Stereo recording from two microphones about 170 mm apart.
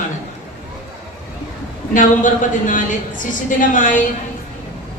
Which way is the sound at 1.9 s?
50° left (ahead or behind).